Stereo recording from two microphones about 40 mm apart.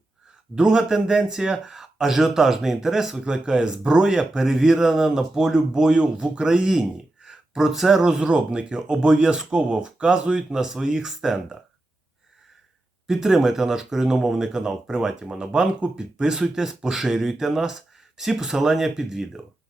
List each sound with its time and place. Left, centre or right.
0.5 s speech: centre
8.3 s speech: right; by 11.5 s centre
13.1 s speech: centre